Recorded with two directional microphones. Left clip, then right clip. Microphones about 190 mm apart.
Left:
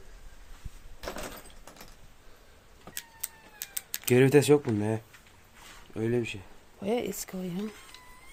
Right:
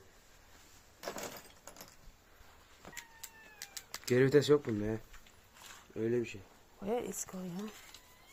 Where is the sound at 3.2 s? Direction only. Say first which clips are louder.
Left 6 dB; 10° left (ahead or behind).